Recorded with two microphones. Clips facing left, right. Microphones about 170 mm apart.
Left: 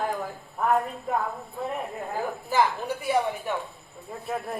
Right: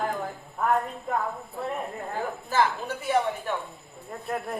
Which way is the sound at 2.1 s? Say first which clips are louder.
Left 2 dB; 10° left (ahead or behind).